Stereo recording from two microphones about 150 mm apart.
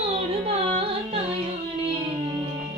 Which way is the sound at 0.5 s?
40° right (ahead or behind).